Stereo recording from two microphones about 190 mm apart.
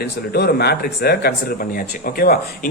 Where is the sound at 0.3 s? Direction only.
55° left (ahead or behind).